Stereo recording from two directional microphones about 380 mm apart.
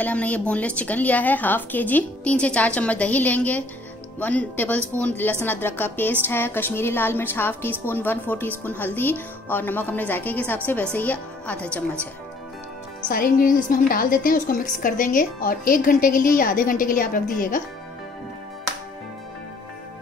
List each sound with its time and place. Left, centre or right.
0.0 s a woman's voice: centre
13.1 s a woman's voice: left